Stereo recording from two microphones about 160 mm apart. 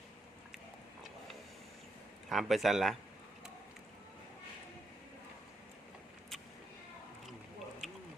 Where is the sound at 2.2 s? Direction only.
Centre (ahead or behind).